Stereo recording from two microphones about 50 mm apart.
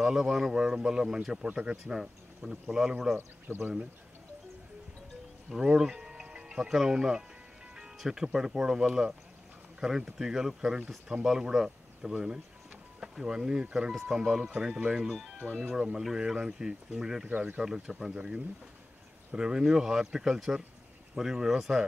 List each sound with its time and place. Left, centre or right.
0.0 s speech: centre
5.5 s speech: centre
15.4 s speech: centre
16.0 s speech: centre
17.3 s speech: right
17.6 s speech: centre